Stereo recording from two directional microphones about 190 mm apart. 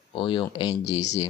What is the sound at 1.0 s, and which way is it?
Speech, 35° left (ahead or behind).